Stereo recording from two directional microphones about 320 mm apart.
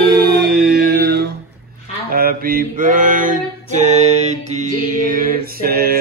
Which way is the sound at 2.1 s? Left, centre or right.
Right.